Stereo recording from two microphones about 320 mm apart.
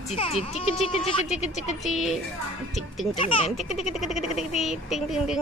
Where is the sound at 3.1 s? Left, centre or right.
Centre.